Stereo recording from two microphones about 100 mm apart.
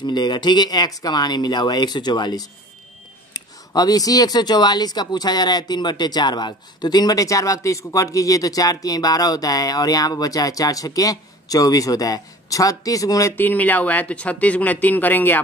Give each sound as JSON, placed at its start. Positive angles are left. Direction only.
{"t": 0.0, "sound": "speech", "side_deg": 45}
{"t": 13.4, "sound": "speech", "side_deg": 15}